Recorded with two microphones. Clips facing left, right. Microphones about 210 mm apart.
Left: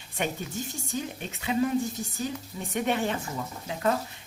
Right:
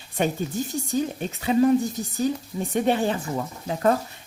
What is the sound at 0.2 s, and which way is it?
Speech, 35° right (ahead or behind).